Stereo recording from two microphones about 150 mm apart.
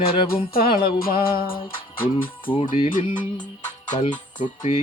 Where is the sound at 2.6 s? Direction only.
65° left (ahead or behind).